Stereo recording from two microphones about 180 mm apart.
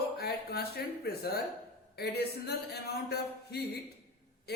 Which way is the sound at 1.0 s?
60° left (ahead or behind).